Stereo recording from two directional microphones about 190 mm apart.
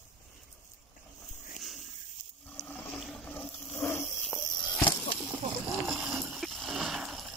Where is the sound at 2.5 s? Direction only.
10° left (ahead or behind).